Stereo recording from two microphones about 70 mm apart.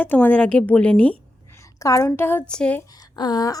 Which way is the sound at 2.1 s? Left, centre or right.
Left.